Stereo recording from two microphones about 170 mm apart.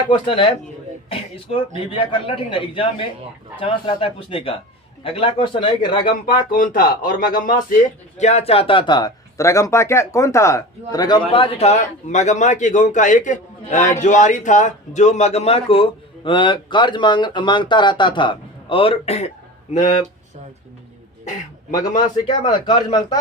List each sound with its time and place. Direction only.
0.1 s a man's voice: 30° left (ahead or behind)
2.0 s a man's voice: 30° left (ahead or behind)
6.5 s a man's voice: 55° left (ahead or behind); by 19.3 s 40° left (ahead or behind)
21.7 s a man's voice: 25° left (ahead or behind)